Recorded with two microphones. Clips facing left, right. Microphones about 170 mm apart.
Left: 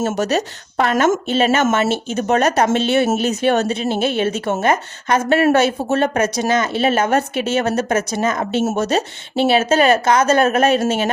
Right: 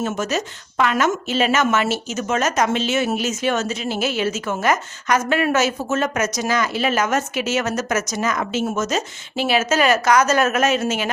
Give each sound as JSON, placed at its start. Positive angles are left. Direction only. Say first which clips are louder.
{"t": 0.0, "sound": "a woman's voice", "louder": "left 4 dB", "side_deg": 35}
{"t": 5.3, "sound": "speech", "louder": "left 8 dB", "side_deg": 40}